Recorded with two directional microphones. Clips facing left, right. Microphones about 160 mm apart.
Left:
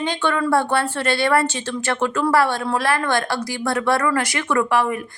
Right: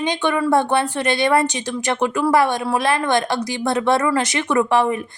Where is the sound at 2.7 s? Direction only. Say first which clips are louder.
Right 2 dB; 20° right (ahead or behind).